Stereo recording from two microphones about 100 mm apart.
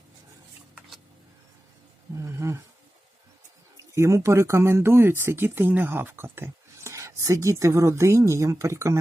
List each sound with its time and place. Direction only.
2.2 s speech: 30° right (ahead or behind)
3.9 s speech: 30° right (ahead or behind)